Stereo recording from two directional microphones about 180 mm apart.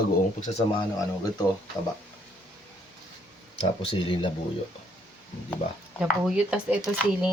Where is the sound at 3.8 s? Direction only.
30° left (ahead or behind).